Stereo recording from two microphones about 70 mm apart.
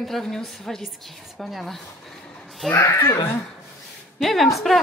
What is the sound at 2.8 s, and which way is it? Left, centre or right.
Speech, left.